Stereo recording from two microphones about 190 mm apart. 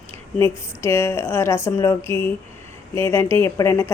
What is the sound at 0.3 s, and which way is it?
Speech, 15° left (ahead or behind).